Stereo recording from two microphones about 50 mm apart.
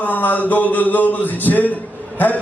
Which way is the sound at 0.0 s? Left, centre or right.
Left.